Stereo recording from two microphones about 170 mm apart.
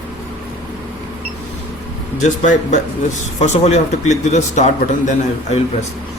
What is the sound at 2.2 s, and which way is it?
Speech, 45° left (ahead or behind).